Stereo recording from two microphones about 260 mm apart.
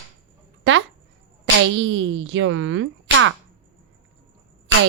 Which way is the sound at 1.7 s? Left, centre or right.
Right.